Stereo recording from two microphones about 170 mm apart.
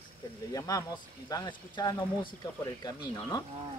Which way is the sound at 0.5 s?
20° left (ahead or behind).